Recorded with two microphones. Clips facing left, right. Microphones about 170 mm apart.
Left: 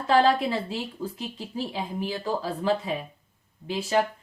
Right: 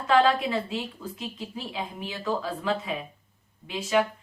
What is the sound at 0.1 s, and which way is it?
Speech, 35° left (ahead or behind).